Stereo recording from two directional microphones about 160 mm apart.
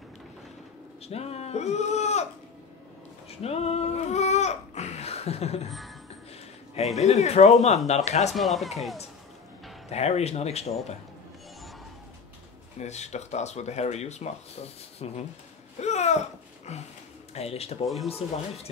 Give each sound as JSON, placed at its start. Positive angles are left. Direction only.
{"t": 1.0, "sound": "speech", "side_deg": 40}
{"t": 3.4, "sound": "speech", "side_deg": 40}
{"t": 5.7, "sound": "speech", "side_deg": 0}
{"t": 7.0, "sound": "speech", "side_deg": 45}
{"t": 8.4, "sound": "speech", "side_deg": 0}
{"t": 9.8, "sound": "speech", "side_deg": 40}
{"t": 12.7, "sound": "speech", "side_deg": 45}